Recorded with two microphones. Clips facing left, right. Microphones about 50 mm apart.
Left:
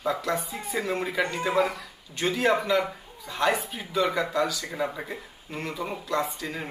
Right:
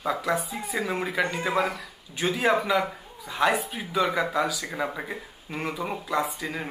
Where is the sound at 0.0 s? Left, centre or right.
Centre.